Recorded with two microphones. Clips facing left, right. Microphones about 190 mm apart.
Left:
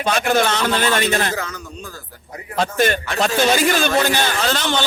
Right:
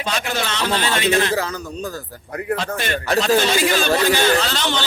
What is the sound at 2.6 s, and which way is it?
Speech, 45° left (ahead or behind).